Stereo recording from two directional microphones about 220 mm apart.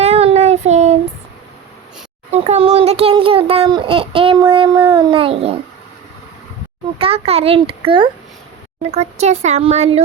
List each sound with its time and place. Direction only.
0.0 s child singing: 30° right (ahead or behind)
2.3 s a sound: 30° right (ahead or behind)
7.0 s a child's voice: 25° right (ahead or behind)